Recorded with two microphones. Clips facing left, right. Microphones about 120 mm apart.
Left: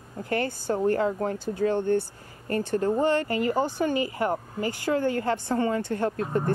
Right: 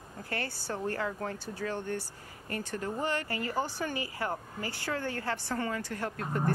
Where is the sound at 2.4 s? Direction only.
35° left (ahead or behind).